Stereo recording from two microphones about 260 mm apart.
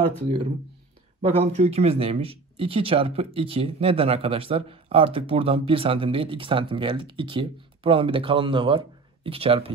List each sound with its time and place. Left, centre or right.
0.2 s speech: centre